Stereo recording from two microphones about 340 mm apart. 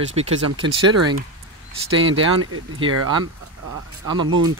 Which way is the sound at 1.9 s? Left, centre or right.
Right.